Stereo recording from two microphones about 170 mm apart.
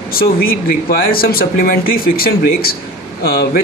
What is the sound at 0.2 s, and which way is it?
Speech, 60° left (ahead or behind).